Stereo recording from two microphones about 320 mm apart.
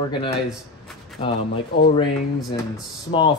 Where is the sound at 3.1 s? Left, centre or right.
Centre.